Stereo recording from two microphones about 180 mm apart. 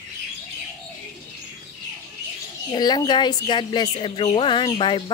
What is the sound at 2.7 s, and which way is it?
Speech, 20° left (ahead or behind).